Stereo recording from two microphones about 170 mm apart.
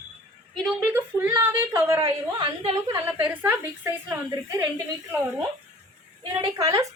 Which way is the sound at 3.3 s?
10° right (ahead or behind).